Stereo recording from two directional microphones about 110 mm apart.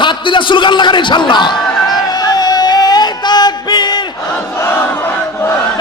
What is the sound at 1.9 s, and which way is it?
Music, 35° left (ahead or behind).